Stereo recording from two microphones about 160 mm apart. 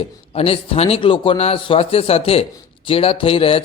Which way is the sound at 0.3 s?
35° left (ahead or behind).